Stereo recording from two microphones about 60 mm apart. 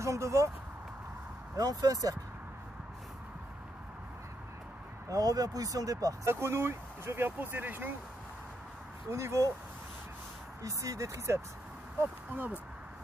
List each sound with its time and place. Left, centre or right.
0.0 s a sound: right
1.6 s speech: right
5.1 s speech: right
6.2 s speech: right
9.1 s speech: right
10.6 s speech: right
12.0 s speech: right